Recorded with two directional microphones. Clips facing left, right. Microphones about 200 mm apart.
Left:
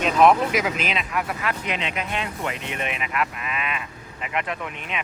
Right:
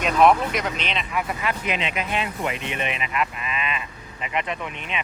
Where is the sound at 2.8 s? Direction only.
Centre (ahead or behind).